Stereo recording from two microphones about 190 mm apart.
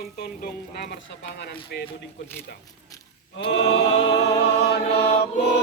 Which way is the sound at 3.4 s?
65° left (ahead or behind).